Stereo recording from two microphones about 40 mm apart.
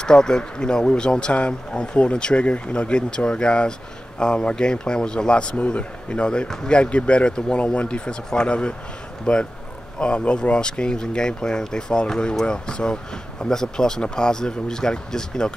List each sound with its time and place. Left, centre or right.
0.0 s speech: centre